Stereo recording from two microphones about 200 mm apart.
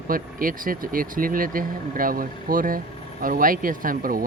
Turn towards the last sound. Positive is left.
turn(degrees=-45)  # may be behind; listen again after turning